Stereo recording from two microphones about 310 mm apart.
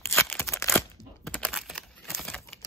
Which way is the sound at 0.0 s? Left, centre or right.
Centre.